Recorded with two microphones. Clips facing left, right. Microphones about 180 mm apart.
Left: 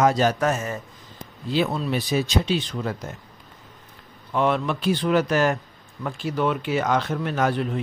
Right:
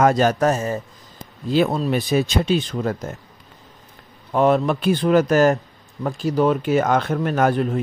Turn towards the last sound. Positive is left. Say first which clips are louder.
# right 4 dB
turn(degrees=-45)  # may be behind; listen again after turning